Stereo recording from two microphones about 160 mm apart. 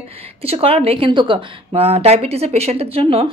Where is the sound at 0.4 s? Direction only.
40° right (ahead or behind).